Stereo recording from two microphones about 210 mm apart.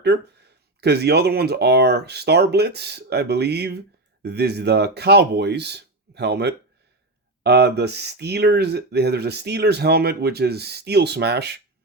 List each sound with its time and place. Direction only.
0.8 s speech: 50° right (ahead or behind)